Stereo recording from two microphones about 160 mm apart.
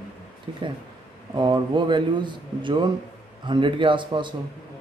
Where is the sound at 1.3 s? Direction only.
30° right (ahead or behind).